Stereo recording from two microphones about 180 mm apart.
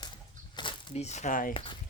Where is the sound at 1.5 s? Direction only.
30° left (ahead or behind).